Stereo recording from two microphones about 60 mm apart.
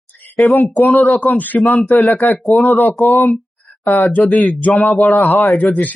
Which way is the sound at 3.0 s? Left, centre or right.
Left.